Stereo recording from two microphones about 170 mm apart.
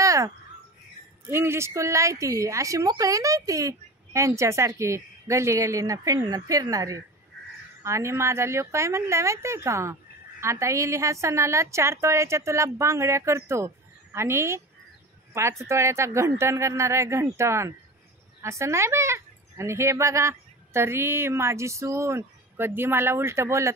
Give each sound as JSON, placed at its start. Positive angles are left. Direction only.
{"t": 0.0, "sound": "bird", "side_deg": -20}
{"t": 1.2, "sound": "a woman's voice", "side_deg": -15}